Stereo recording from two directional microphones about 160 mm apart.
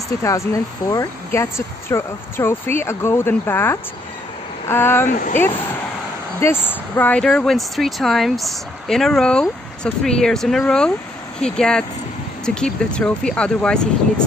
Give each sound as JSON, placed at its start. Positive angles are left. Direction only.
{"t": 0.2, "sound": "speech", "side_deg": 20}